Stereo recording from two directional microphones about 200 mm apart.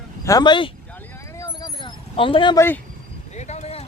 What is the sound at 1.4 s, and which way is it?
Vehicle, 20° left (ahead or behind).